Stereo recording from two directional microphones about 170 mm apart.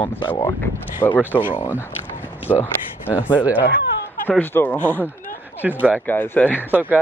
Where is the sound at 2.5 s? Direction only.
10° left (ahead or behind).